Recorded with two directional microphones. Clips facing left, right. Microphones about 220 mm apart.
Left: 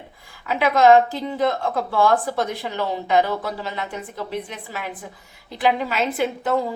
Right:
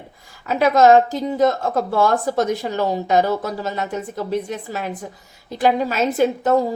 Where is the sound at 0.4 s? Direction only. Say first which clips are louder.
Right 2 dB; 40° right (ahead or behind).